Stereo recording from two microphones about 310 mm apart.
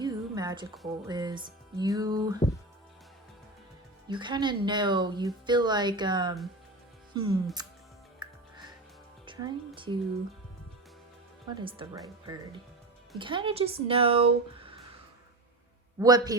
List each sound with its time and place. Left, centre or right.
0.0 s music: centre
1.0 s speech: centre
4.1 s speech: centre
8.2 s music: centre
9.2 s a woman's voice: centre
11.4 s speech: centre
16.0 s speech: centre